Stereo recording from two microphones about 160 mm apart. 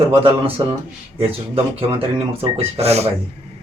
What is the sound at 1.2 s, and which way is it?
A man's voice, 35° right (ahead or behind).